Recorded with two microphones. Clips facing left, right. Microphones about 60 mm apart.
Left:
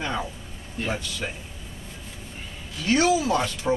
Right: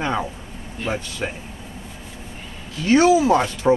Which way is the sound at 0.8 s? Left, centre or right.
Centre.